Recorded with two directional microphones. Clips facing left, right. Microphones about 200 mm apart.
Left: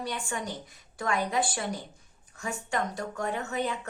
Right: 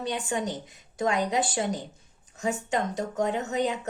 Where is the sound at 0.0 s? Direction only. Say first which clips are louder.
Right 5 dB; 20° right (ahead or behind).